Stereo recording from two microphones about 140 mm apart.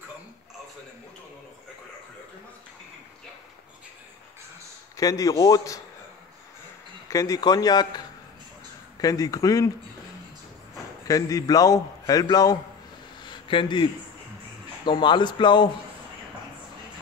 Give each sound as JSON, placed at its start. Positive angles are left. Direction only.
{"t": 4.9, "sound": "a man's voice", "side_deg": 25}
{"t": 7.1, "sound": "a man's voice", "side_deg": 25}
{"t": 11.1, "sound": "a man's voice", "side_deg": 25}
{"t": 13.2, "sound": "a sound", "side_deg": 35}
{"t": 14.9, "sound": "speech", "side_deg": 35}